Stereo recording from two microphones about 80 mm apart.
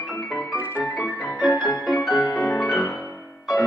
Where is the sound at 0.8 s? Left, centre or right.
Centre.